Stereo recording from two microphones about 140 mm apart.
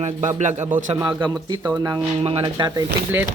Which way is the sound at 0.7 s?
70° right (ahead or behind).